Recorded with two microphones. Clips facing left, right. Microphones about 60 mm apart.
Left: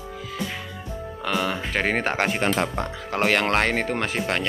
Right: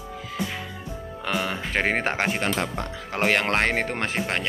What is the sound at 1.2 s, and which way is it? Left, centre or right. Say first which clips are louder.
Speech: left 2 dB; centre.